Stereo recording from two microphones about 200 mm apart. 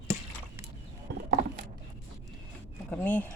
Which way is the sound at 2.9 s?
5° left (ahead or behind).